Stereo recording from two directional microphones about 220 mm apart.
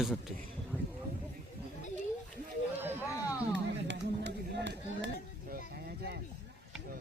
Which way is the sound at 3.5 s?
55° right (ahead or behind).